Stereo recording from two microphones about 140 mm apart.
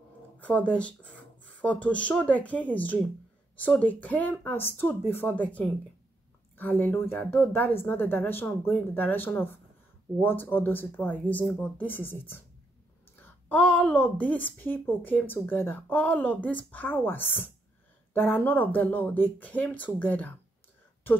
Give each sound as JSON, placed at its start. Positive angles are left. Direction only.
{"t": 0.4, "sound": "a woman's voice", "side_deg": 10}